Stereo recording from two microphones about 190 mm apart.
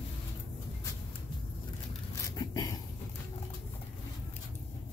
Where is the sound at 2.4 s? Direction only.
20° left (ahead or behind).